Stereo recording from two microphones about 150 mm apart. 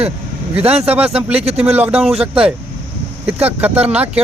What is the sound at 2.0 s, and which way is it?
Speech, 40° right (ahead or behind).